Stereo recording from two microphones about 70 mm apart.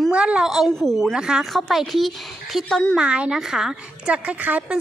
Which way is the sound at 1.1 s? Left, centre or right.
Centre.